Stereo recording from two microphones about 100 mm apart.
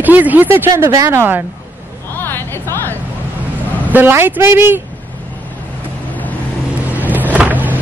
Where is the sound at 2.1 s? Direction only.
20° left (ahead or behind).